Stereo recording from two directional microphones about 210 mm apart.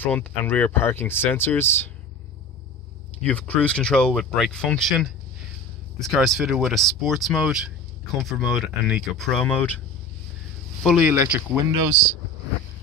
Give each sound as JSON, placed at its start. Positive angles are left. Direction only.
{"t": 0.0, "sound": "speech", "side_deg": 10}
{"t": 3.2, "sound": "speech", "side_deg": 5}
{"t": 10.8, "sound": "speech", "side_deg": 0}